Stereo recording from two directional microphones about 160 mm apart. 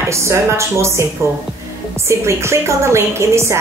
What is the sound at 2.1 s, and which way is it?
A woman's voice, 15° right (ahead or behind).